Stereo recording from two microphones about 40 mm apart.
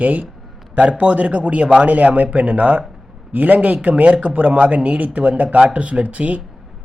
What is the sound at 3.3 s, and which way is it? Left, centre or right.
A man's voice, right.